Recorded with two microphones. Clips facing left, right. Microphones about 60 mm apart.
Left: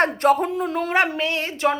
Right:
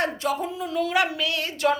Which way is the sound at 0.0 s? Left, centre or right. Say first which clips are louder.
Left 8 dB; left.